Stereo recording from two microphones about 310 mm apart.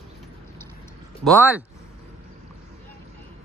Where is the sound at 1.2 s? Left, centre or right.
Centre.